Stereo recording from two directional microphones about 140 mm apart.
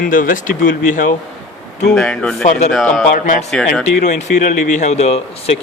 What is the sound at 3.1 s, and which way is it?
Speech, 70° left (ahead or behind).